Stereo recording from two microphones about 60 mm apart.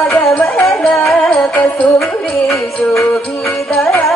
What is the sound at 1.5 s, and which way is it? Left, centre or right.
Music, left.